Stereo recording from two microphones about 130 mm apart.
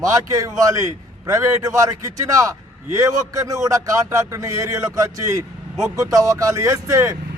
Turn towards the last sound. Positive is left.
turn(degrees=-25)  # may be behind; listen again after turning